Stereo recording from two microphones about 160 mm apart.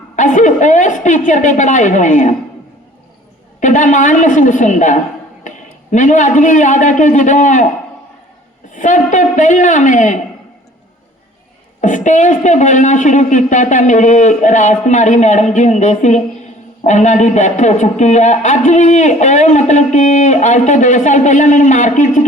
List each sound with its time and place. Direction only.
0.2 s speech: 50° left (ahead or behind)
3.6 s a man's voice: 50° left (ahead or behind)
8.7 s speech: 50° left (ahead or behind)
11.8 s speech: 50° left (ahead or behind)